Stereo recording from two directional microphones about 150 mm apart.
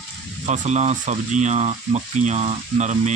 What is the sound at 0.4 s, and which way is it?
Speech, 50° right (ahead or behind).